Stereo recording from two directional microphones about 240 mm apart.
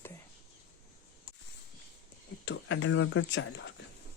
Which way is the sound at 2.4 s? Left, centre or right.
Left.